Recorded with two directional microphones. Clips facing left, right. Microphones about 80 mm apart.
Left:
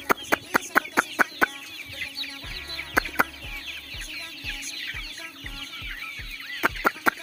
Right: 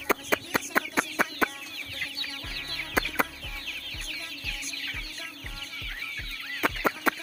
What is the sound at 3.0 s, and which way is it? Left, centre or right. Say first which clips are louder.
Chicken: left 3 dB; centre.